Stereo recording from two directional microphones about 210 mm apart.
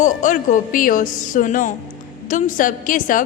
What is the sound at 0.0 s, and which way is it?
A woman's voice, 40° left (ahead or behind).